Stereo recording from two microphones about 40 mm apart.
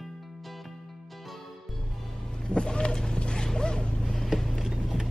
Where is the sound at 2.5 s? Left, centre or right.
Left.